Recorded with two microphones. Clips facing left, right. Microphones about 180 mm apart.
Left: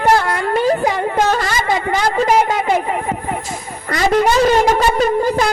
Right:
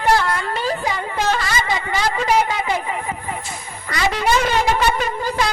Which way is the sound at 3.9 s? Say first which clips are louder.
Left 5 dB; 45° left (ahead or behind).